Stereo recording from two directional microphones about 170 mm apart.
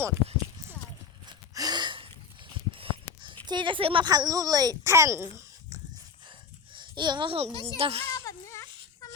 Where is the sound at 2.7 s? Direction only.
30° right (ahead or behind).